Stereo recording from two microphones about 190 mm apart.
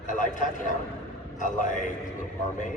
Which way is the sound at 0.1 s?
45° left (ahead or behind).